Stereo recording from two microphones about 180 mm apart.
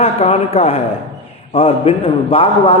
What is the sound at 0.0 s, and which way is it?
A man's voice, 35° left (ahead or behind).